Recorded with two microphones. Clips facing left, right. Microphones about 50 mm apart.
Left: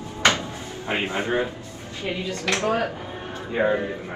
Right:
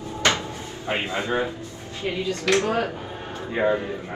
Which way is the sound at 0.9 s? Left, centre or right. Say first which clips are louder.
Left 1 dB; left.